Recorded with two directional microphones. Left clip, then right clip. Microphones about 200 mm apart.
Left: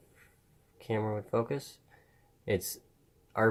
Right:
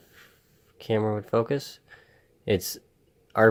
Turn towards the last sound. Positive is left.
turn(degrees=-25)  # may be behind; listen again after turning